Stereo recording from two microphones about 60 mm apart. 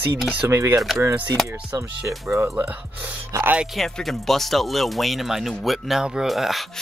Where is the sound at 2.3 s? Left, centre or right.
Right.